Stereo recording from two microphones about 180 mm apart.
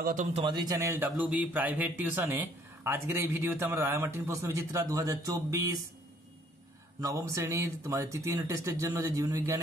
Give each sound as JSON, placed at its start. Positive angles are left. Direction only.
{"t": 0.0, "sound": "a man's voice", "side_deg": -45}
{"t": 0.4, "sound": "speech", "side_deg": -25}
{"t": 7.0, "sound": "speech", "side_deg": -15}